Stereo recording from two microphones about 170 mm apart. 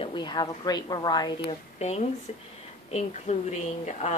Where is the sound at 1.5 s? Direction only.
40° left (ahead or behind).